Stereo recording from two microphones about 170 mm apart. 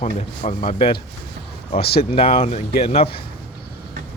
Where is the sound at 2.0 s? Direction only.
35° left (ahead or behind).